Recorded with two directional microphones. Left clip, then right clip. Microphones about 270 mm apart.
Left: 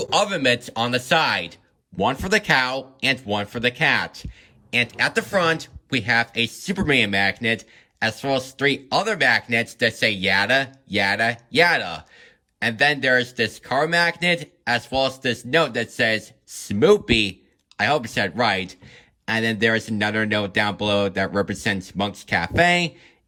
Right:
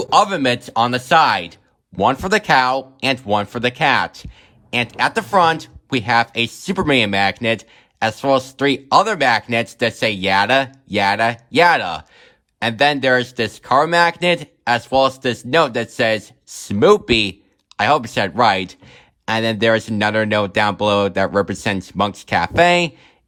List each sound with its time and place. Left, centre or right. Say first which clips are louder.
0.0 s speech: right 5 dB; centre